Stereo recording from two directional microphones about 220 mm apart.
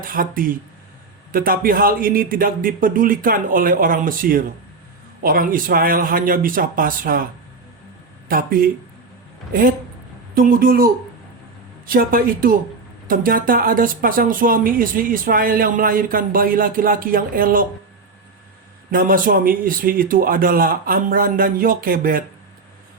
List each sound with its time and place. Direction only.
0.0 s speech: 40° right (ahead or behind)
8.3 s speech: 40° right (ahead or behind)
18.9 s speech: 40° right (ahead or behind)